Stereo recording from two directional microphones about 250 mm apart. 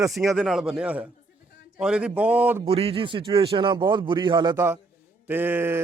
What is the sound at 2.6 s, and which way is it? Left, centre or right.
A man's voice, right.